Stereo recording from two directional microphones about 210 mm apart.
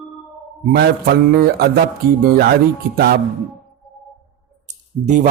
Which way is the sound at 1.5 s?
45° right (ahead or behind).